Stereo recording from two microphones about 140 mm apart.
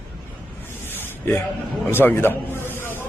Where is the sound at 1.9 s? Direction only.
15° left (ahead or behind).